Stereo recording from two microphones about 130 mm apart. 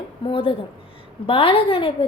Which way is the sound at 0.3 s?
45° left (ahead or behind).